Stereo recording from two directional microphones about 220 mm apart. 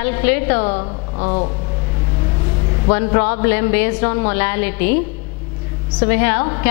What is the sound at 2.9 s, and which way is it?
A woman's voice, 10° left (ahead or behind).